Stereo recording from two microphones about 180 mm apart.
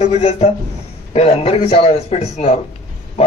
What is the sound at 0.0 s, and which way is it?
A man's voice, 35° left (ahead or behind).